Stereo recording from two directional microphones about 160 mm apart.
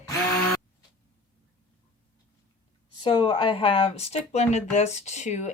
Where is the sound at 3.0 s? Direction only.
30° left (ahead or behind).